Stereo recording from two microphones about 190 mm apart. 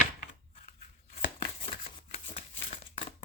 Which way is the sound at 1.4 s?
30° left (ahead or behind).